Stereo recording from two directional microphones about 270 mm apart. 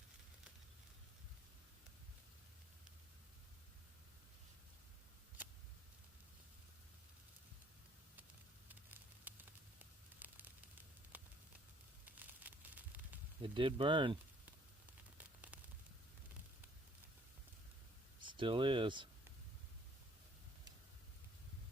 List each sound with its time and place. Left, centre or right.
8.9 s fire: centre
11.1 s a sound: centre
12.4 s a sound: centre
13.4 s speech: centre
15.2 s static: centre
18.2 s speech: centre